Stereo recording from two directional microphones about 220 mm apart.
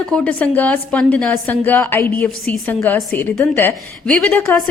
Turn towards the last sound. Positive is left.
turn(degrees=5)  # may be behind; listen again after turning